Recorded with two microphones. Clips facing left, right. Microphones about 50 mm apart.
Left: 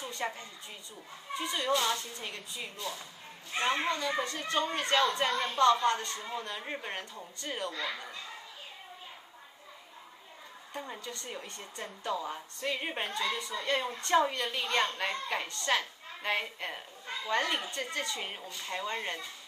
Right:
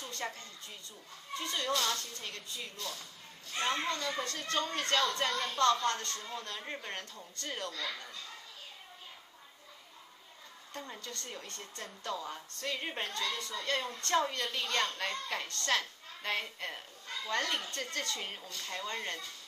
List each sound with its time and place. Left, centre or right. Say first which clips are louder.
0.0 s a woman's voice: left 4 dB; centre
10.7 s a woman's voice: left 3 dB; centre